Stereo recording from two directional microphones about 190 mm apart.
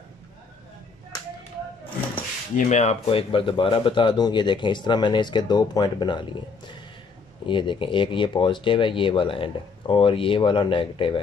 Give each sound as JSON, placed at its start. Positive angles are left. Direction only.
{"t": 2.5, "sound": "speech", "side_deg": 35}